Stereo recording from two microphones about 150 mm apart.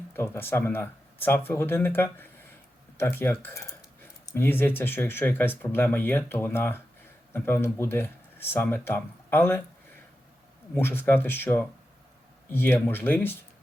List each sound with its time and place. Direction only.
0.1 s speech: 15° left (ahead or behind)
10.8 s speech: 15° left (ahead or behind)